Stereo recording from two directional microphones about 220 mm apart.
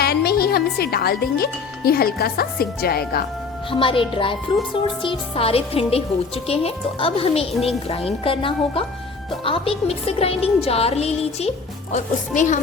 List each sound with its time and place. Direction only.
0.0 s speech: 45° left (ahead or behind)
3.7 s a woman's voice: 25° left (ahead or behind)